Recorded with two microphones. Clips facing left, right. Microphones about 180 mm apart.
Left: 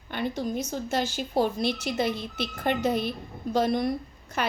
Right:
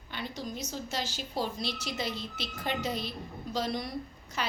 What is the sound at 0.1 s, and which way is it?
A woman's voice, 55° left (ahead or behind).